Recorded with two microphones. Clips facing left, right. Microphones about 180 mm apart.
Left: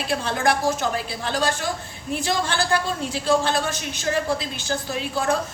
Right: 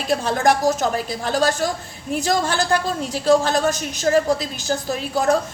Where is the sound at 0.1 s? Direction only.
40° right (ahead or behind).